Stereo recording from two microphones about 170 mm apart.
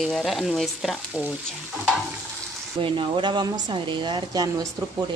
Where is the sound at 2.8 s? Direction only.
30° right (ahead or behind).